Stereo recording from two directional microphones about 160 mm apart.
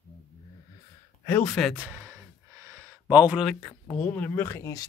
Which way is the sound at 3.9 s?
10° left (ahead or behind).